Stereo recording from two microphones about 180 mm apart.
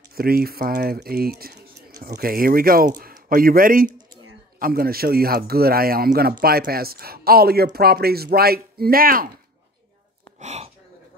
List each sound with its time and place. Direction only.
0.1 s speech: 55° right (ahead or behind)
10.4 s speech: 40° right (ahead or behind)